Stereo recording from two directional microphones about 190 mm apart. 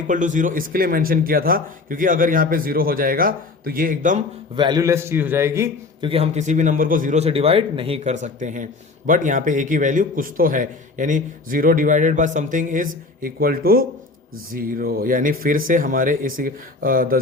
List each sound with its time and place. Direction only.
0.1 s a man's voice: 40° right (ahead or behind)
4.5 s a man's voice: 25° right (ahead or behind)
6.1 s a man's voice: 35° right (ahead or behind); by 17.2 s 50° right (ahead or behind)